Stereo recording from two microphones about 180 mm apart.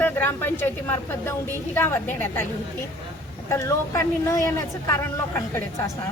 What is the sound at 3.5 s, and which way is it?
Speech, 15° left (ahead or behind).